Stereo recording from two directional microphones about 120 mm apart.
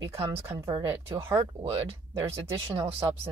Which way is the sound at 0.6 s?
45° right (ahead or behind).